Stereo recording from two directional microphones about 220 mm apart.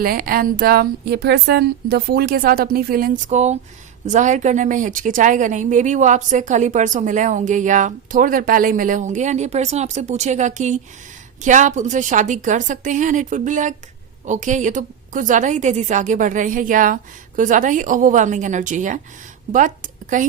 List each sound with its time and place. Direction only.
0.0 s a woman's voice: 40° right (ahead or behind)